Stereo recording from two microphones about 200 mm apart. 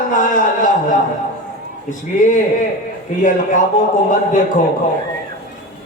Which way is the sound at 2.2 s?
40° left (ahead or behind).